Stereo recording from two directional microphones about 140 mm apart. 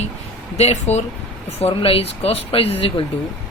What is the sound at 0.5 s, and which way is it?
Speech, 50° left (ahead or behind).